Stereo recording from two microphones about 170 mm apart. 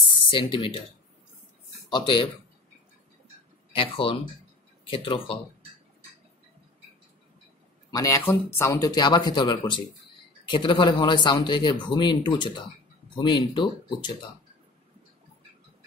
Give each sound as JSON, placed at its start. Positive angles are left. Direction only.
{"t": 0.3, "sound": "speech", "side_deg": 30}
{"t": 1.9, "sound": "speech", "side_deg": 25}
{"t": 3.7, "sound": "speech", "side_deg": 30}
{"t": 7.9, "sound": "speech", "side_deg": 20}